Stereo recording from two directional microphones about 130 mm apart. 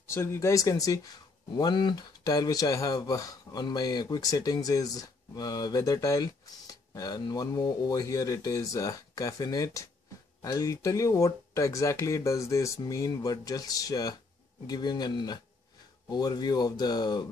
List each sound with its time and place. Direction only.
0.0 s speech: 20° left (ahead or behind)